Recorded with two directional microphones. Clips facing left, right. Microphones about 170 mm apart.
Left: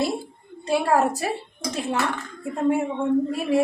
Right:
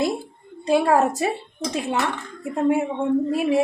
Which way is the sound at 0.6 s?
15° right (ahead or behind).